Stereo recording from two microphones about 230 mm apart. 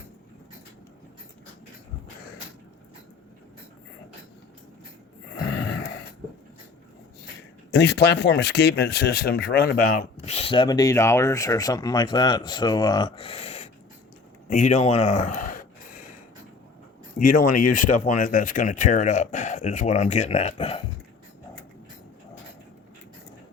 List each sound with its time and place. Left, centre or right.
5.5 s gasp: left
7.7 s speech: left
9.9 s speech: left
17.2 s speech: left